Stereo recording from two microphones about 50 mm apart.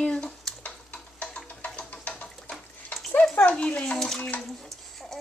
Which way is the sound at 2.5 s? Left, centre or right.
Centre.